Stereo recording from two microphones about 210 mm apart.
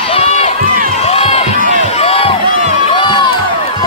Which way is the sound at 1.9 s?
30° left (ahead or behind).